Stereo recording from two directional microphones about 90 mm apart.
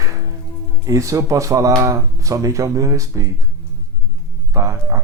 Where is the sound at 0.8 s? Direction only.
35° right (ahead or behind).